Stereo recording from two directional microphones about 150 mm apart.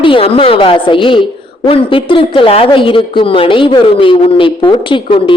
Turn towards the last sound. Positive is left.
turn(degrees=35)  # may be behind; listen again after turning